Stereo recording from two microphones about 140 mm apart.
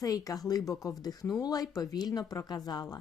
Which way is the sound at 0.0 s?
25° left (ahead or behind).